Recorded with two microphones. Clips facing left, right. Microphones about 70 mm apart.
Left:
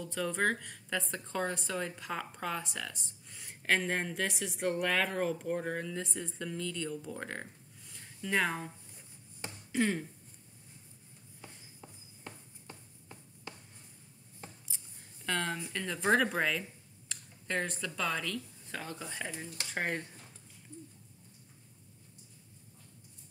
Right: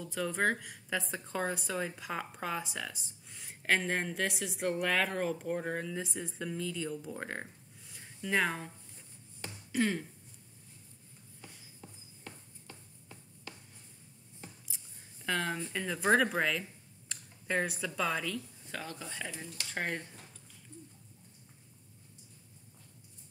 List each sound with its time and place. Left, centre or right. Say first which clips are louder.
0.0 s speech: even; centre
11.8 s a sound: left 1 dB; left
15.2 s speech: right 1 dB; centre
18.9 s speech: left 1 dB; centre